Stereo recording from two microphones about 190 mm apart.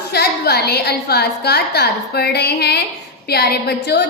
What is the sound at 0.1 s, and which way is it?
A woman's voice, 60° left (ahead or behind).